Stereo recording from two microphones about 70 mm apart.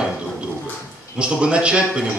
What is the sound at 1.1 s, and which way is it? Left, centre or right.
Speech, centre.